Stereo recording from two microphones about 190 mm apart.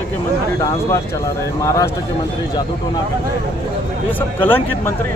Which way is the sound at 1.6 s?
15° left (ahead or behind).